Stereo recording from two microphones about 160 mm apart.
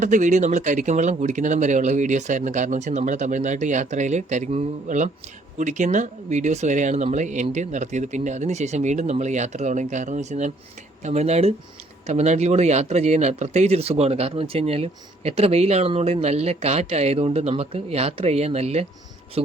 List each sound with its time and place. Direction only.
0.0 s speech: 50° right (ahead or behind)